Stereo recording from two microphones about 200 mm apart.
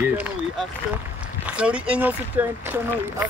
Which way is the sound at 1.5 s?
5° right (ahead or behind).